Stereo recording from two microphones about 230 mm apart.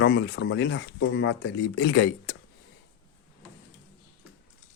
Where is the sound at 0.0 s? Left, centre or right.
Left.